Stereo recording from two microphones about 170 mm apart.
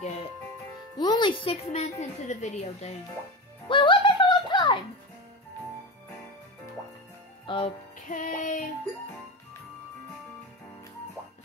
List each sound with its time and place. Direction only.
0.9 s speech: 25° left (ahead or behind); by 3.0 s 40° left (ahead or behind)
3.6 s music: 30° left (ahead or behind)
7.4 s music: 30° left (ahead or behind)
8.1 s music: 50° left (ahead or behind)